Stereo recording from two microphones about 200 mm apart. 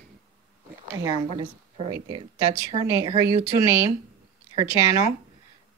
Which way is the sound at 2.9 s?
15° right (ahead or behind).